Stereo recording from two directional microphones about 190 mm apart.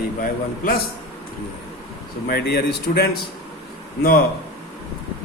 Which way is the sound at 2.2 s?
55° left (ahead or behind).